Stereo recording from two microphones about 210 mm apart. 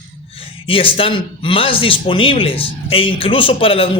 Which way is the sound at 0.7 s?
25° left (ahead or behind).